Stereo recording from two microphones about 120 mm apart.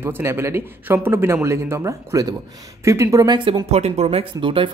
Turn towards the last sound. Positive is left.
turn(degrees=-45)  # may be behind; listen again after turning